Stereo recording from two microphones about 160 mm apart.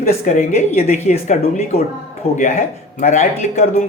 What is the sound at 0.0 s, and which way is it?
A woman's voice, 50° left (ahead or behind).